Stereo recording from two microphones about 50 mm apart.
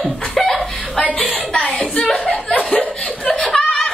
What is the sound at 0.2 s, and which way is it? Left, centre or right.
Chuckle, centre.